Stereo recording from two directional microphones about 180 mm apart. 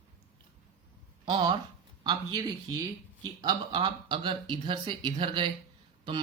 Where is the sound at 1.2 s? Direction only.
25° right (ahead or behind).